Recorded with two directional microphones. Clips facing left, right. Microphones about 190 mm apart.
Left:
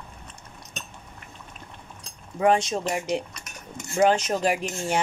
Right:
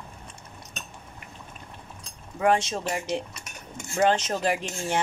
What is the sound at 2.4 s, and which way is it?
Speech, 20° left (ahead or behind).